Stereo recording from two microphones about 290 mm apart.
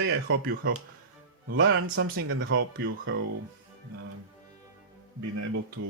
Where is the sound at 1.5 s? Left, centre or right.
Right.